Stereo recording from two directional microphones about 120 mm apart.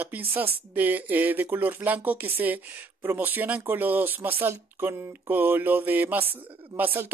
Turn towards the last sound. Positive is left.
turn(degrees=-15)  # may be behind; listen again after turning